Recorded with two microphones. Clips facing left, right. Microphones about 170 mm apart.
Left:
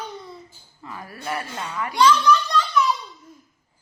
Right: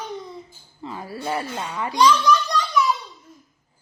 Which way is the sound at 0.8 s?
25° right (ahead or behind).